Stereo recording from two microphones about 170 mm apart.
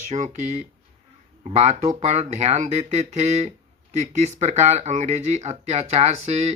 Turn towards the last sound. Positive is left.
turn(degrees=-40)  # may be behind; listen again after turning